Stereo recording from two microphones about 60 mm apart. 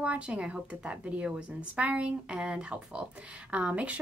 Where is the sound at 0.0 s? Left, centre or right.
Centre.